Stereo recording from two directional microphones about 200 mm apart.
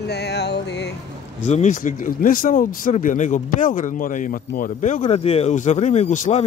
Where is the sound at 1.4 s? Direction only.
35° left (ahead or behind).